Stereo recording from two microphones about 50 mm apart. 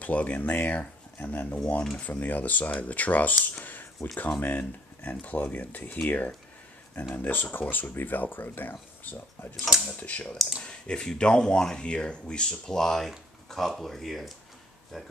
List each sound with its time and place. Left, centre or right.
0.0 s speech: left
7.9 s speech: left
10.6 s speech: centre